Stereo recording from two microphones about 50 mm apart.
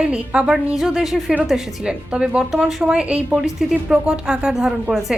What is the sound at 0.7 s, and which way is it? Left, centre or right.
Speech, centre.